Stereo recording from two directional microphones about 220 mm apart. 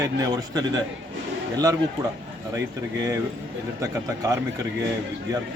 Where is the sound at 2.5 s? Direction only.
15° right (ahead or behind).